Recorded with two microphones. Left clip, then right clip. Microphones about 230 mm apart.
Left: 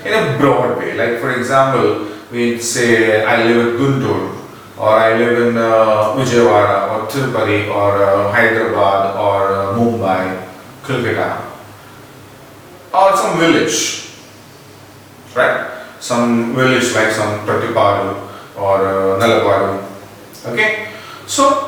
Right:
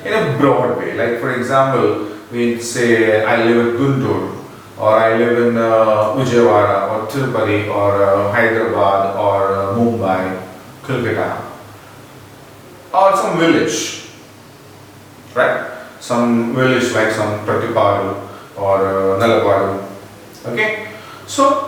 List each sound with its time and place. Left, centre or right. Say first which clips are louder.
0.0 s speech: left 1 dB; centre
9.7 s speech: left 1 dB; right
10.0 s a man's voice: left 1 dB; centre
12.9 s a man's voice: left 1 dB; centre
15.4 s a man's voice: left 1 dB; centre